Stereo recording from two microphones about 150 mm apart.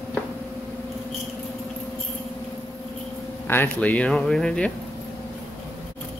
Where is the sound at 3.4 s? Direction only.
15° left (ahead or behind).